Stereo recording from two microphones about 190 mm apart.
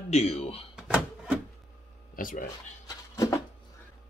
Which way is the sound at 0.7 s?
5° right (ahead or behind).